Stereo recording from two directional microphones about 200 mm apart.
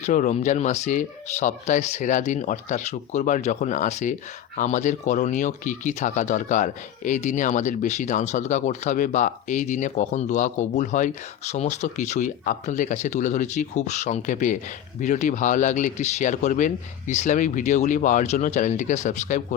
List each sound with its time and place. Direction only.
0.0 s speech: 40° left (ahead or behind)